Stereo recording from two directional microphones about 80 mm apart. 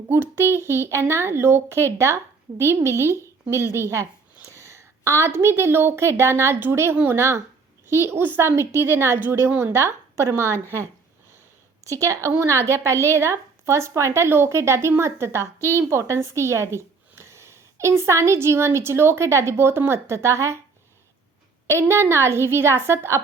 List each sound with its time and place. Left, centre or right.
0.1 s a woman's voice: right
7.2 s speech: right
11.9 s speech: right
15.5 s a woman's voice: left
15.9 s speech: right
21.7 s speech: right